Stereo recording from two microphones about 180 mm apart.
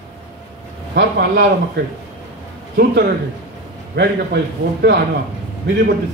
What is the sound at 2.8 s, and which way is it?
A man's voice, 65° right (ahead or behind).